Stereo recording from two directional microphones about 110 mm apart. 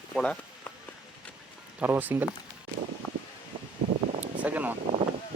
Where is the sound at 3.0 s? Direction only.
15° left (ahead or behind).